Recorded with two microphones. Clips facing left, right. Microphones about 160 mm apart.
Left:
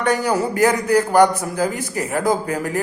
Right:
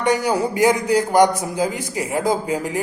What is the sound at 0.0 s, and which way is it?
Speech, 15° right (ahead or behind).